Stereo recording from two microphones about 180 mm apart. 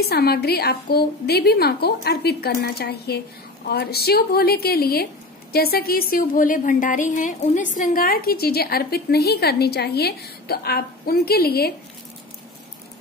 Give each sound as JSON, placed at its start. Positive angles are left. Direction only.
{"t": 0.0, "sound": "a woman's voice", "side_deg": 60}